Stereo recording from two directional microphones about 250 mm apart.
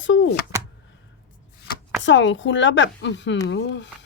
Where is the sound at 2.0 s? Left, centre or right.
Left.